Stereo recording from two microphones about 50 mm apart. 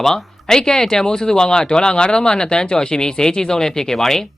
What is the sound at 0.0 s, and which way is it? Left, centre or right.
Speech, centre.